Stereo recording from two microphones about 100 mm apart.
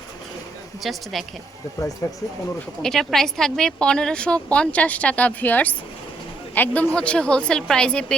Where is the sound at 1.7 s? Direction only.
30° left (ahead or behind).